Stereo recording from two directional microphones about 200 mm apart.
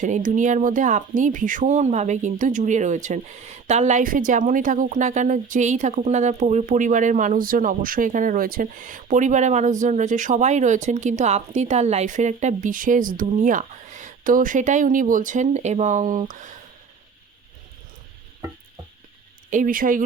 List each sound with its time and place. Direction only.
0.0 s speech: 40° right (ahead or behind)
19.5 s speech: 40° right (ahead or behind)